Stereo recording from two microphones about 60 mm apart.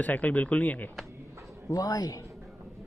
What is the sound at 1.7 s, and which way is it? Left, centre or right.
Speech, left.